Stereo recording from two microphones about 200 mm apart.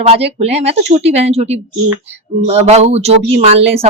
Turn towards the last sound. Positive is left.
turn(degrees=-30)  # may be behind; listen again after turning